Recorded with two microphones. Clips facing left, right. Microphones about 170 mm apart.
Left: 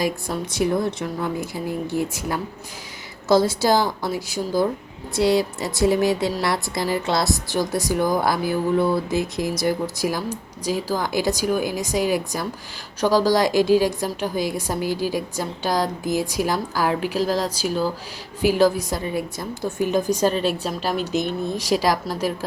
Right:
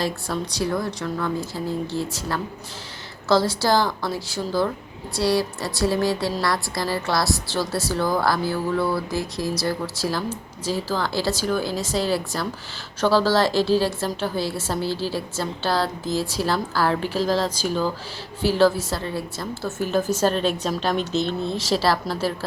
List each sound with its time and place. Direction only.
0.0 s a woman's voice: 20° left (ahead or behind)